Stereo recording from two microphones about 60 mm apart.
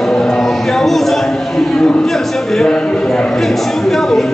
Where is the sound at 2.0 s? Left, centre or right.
Centre.